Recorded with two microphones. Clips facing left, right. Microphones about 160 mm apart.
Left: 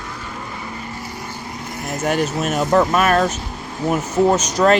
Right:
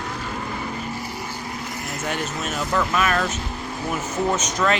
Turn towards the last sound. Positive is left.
turn(degrees=40)  # may be behind; listen again after turning